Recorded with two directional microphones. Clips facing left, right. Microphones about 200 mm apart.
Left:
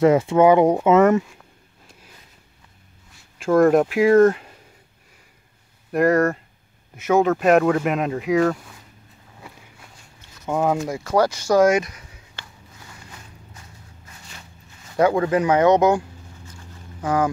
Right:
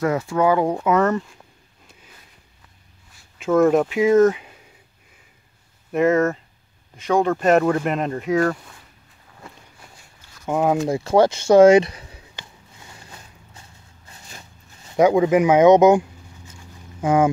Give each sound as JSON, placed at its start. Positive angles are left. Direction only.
{"t": 0.0, "sound": "speech", "side_deg": 25}
{"t": 3.3, "sound": "speech", "side_deg": -5}
{"t": 5.9, "sound": "speech", "side_deg": 0}
{"t": 9.4, "sound": "a sound", "side_deg": 5}
{"t": 10.4, "sound": "speech", "side_deg": -10}
{"t": 10.8, "sound": "speech", "side_deg": -25}
{"t": 12.4, "sound": "a sound", "side_deg": -25}
{"t": 15.0, "sound": "speech", "side_deg": -15}
{"t": 17.0, "sound": "speech", "side_deg": -25}